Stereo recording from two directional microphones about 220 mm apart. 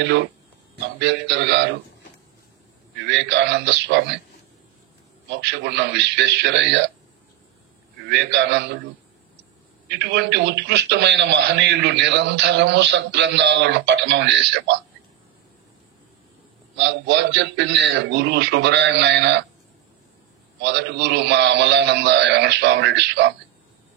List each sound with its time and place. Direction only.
0.9 s a man's voice: 50° right (ahead or behind)
3.1 s a man's voice: 50° right (ahead or behind)
5.5 s a man's voice: 50° right (ahead or behind)
8.1 s a man's voice: 50° right (ahead or behind)
9.8 s a man's voice: 50° right (ahead or behind)
16.7 s a man's voice: 50° right (ahead or behind)
20.6 s a man's voice: 50° right (ahead or behind)